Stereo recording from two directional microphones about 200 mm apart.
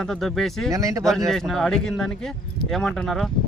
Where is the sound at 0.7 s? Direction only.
15° right (ahead or behind).